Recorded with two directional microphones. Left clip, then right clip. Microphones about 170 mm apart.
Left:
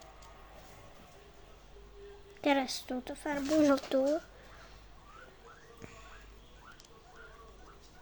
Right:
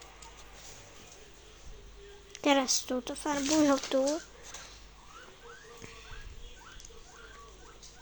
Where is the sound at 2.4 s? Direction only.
15° left (ahead or behind).